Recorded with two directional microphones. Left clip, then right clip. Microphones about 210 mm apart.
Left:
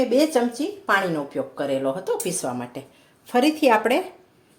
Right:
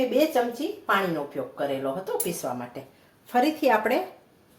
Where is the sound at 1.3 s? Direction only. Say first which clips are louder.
Left 4 dB; 50° left (ahead or behind).